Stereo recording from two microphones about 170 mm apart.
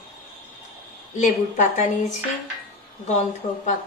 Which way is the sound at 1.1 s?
45° left (ahead or behind).